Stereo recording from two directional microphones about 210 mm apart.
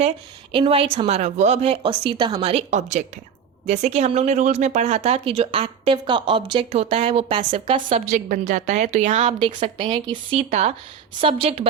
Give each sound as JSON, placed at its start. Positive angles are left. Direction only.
{"t": 0.5, "sound": "a woman's voice", "side_deg": -25}